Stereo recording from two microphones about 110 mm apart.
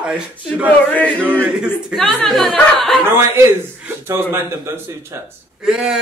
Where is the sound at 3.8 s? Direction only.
20° right (ahead or behind).